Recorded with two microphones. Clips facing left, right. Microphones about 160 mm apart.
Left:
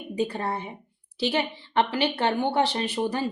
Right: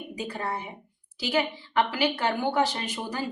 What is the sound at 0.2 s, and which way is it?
A woman's voice, 35° left (ahead or behind).